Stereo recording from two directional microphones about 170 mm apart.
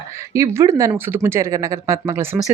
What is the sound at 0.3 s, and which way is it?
Speech, 15° right (ahead or behind).